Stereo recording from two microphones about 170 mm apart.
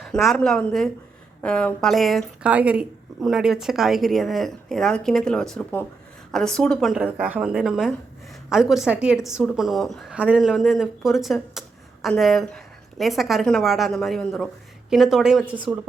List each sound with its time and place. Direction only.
0.0 s speech: centre (ahead or behind)